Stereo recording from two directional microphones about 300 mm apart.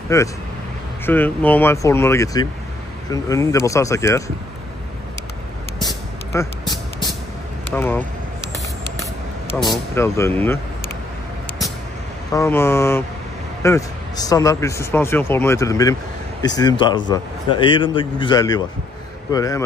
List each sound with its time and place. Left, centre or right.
0.1 s speech: centre
6.3 s speech: centre
7.7 s speech: centre
9.7 s speech: centre
12.3 s speech: centre